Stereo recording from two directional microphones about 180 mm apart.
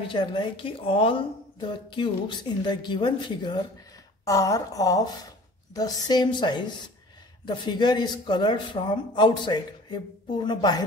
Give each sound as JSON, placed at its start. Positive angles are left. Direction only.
{"t": 0.1, "sound": "speech", "side_deg": 25}